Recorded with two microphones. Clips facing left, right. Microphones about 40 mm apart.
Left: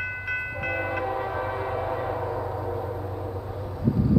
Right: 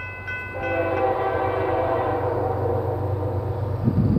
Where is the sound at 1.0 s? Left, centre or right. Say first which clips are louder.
Right 6 dB; right.